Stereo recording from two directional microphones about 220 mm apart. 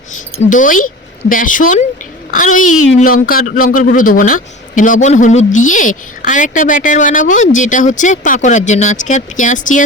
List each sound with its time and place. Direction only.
0.3 s a man's voice: 35° left (ahead or behind)
2.7 s speech: 65° left (ahead or behind)
3.0 s a man's voice: 40° left (ahead or behind)